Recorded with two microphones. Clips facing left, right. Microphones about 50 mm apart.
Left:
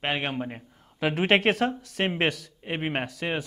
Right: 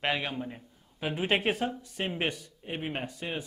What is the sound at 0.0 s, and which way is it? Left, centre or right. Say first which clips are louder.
Speech: left 2 dB; left.